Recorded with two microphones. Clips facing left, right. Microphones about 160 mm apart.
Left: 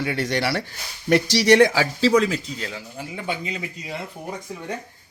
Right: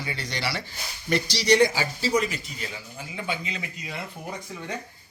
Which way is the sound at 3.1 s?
40° left (ahead or behind).